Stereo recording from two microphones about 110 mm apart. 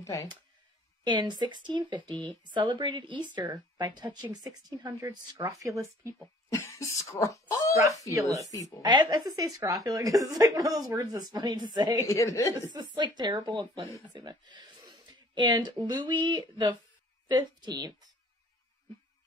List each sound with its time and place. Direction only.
0.0 s speech: 25° left (ahead or behind)
1.0 s speech: 45° right (ahead or behind)
6.5 s speech: 25° left (ahead or behind)
7.7 s speech: 30° right (ahead or behind)
8.5 s a woman's voice: 30° left (ahead or behind)
9.3 s speech: 35° right (ahead or behind)
12.1 s a woman's voice: 30° left (ahead or behind)
12.7 s speech: 45° right (ahead or behind)